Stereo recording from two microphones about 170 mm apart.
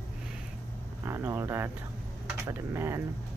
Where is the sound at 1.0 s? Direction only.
15° right (ahead or behind).